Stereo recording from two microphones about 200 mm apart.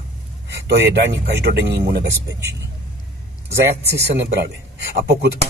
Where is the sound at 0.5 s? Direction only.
60° right (ahead or behind).